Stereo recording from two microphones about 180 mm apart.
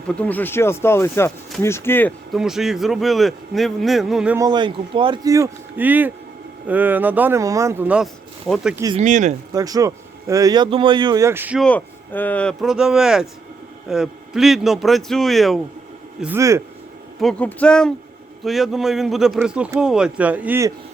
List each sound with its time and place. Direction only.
0.2 s speech: 10° left (ahead or behind)
2.3 s speech: centre (ahead or behind)
4.4 s speech: 25° right (ahead or behind); by 8.7 s centre (ahead or behind)
9.0 s speech: 40° right (ahead or behind)
9.5 s speech: 20° right (ahead or behind)
11.6 s speech: 10° left (ahead or behind)
16.2 s speech: 15° right (ahead or behind)
17.2 s speech: 5° left (ahead or behind); by 20.7 s 15° right (ahead or behind)